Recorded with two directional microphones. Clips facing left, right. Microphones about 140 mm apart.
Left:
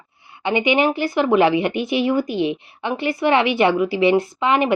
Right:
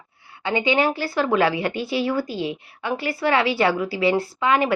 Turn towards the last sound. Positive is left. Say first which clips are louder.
# left 2 dB
turn(degrees=20)  # may be behind; listen again after turning